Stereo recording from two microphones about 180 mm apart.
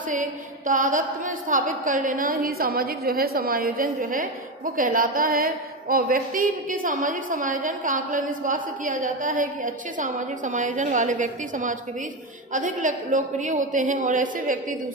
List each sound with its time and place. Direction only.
0.1 s a woman's voice: 45° right (ahead or behind)